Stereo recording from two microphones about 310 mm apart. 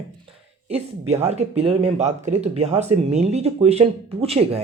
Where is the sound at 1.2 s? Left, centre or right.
Right.